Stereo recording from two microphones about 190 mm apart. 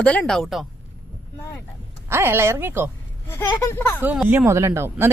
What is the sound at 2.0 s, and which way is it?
Speech, 10° right (ahead or behind).